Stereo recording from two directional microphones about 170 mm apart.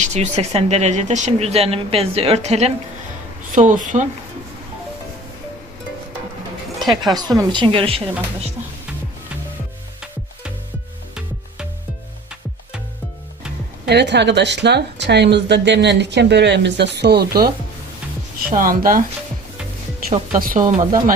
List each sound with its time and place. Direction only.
0.0 s speech: 40° right (ahead or behind)
3.5 s speech: 50° right (ahead or behind)
7.1 s a woman's voice: 25° right (ahead or behind)
13.8 s speech: 80° right
18.5 s speech: 55° right (ahead or behind)
20.1 s speech: 40° right (ahead or behind)
20.4 s speech: 50° right (ahead or behind)